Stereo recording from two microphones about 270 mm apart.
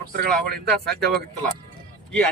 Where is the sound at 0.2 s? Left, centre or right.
Right.